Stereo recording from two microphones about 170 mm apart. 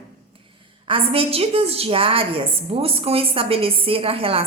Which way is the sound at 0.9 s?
35° right (ahead or behind).